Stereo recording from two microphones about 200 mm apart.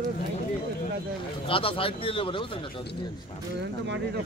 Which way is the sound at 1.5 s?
25° left (ahead or behind).